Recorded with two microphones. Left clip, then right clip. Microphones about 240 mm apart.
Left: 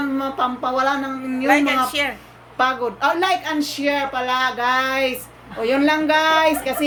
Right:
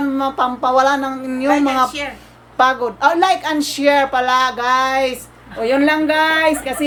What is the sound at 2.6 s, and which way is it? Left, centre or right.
A woman's voice, centre.